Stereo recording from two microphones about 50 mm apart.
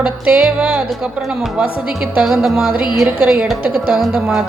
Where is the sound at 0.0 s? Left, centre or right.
Centre.